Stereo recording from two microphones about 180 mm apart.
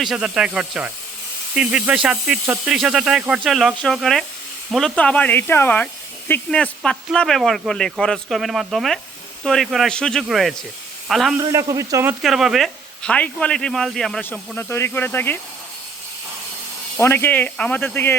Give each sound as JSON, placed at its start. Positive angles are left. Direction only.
{"t": 0.0, "sound": "speech", "side_deg": -5}
{"t": 11.3, "sound": "speech", "side_deg": -20}
{"t": 12.2, "sound": "speech", "side_deg": 0}
{"t": 17.0, "sound": "speech", "side_deg": 10}